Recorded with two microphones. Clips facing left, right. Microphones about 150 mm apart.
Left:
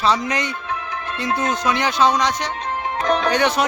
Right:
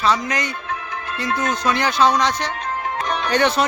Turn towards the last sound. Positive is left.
turn(degrees=15)  # may be behind; listen again after turning